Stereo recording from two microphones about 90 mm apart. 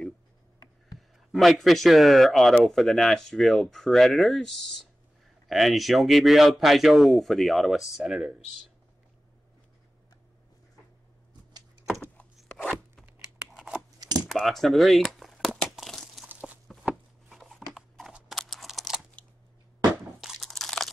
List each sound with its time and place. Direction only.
0.9 s speech: centre (ahead or behind)
13.0 s tearing: 10° right (ahead or behind)
14.2 s crumpling: centre (ahead or behind)
16.3 s a sound: 15° right (ahead or behind)
16.8 s a sound: centre (ahead or behind)
20.2 s crunch: centre (ahead or behind)